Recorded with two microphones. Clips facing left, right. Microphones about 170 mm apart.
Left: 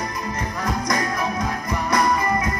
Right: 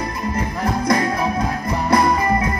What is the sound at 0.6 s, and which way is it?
Music, 30° right (ahead or behind).